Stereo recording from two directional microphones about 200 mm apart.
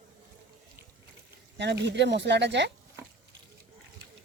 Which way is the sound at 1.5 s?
60° right (ahead or behind).